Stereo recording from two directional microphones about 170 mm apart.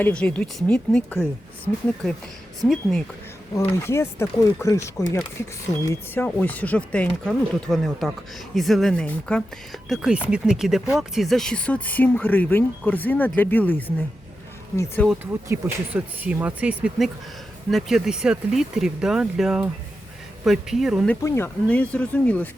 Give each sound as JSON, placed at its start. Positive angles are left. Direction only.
{"t": 0.0, "sound": "speech", "side_deg": 5}
{"t": 3.5, "sound": "speech", "side_deg": 15}
{"t": 15.2, "sound": "speech", "side_deg": -15}
{"t": 21.1, "sound": "speech", "side_deg": 15}